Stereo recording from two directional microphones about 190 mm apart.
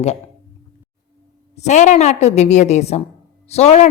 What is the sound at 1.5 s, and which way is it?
A woman's voice, 40° left (ahead or behind).